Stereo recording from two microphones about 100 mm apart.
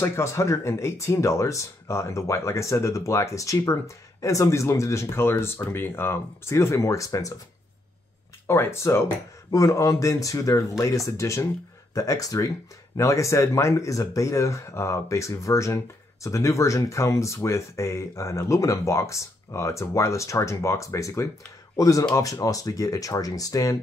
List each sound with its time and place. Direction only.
0.0 s speech: 25° left (ahead or behind)
8.5 s speech: 25° left (ahead or behind)